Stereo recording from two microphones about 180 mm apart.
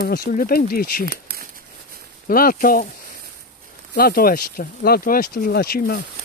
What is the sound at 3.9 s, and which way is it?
Speech, 55° left (ahead or behind).